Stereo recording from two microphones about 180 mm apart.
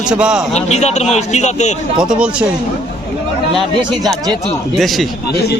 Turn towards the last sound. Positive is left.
turn(degrees=0)  # may be behind; listen again after turning